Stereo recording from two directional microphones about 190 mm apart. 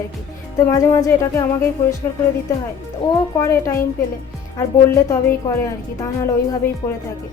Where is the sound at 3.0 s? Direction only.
15° left (ahead or behind).